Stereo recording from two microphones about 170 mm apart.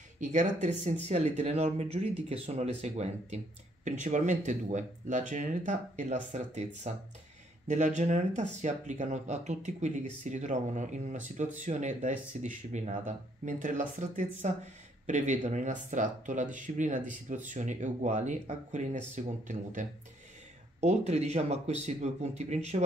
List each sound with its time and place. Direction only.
0.2 s speech: 45° right (ahead or behind)